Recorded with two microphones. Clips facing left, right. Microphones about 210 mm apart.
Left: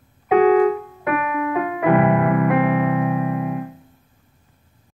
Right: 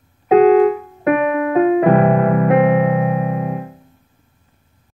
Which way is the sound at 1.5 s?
25° right (ahead or behind).